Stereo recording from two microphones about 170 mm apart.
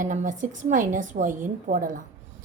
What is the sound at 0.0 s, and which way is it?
A woman's voice, 45° right (ahead or behind).